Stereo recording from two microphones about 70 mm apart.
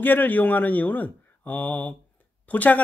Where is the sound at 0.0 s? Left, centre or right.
Left.